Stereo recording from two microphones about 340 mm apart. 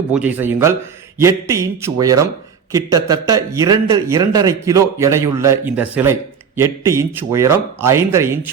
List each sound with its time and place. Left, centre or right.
0.1 s a man's voice: centre